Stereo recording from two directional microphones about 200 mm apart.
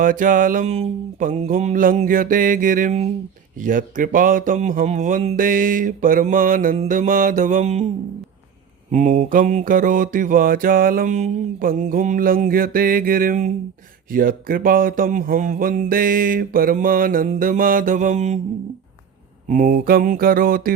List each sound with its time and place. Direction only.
0.0 s mantra: 40° right (ahead or behind)
3.6 s speech: 40° right (ahead or behind)
8.9 s mantra: 35° right (ahead or behind)
19.5 s mantra: 40° right (ahead or behind)